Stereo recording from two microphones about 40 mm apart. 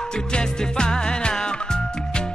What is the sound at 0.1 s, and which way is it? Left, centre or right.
Music, centre.